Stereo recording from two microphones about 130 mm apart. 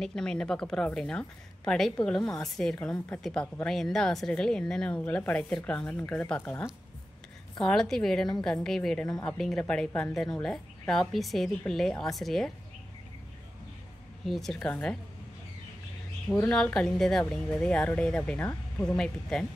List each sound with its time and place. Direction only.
0.0 s a woman's voice: 5° left (ahead or behind)
14.2 s a woman's voice: centre (ahead or behind)
16.5 s speech: 5° left (ahead or behind)